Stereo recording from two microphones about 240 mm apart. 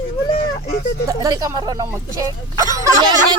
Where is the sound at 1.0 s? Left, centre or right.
Centre.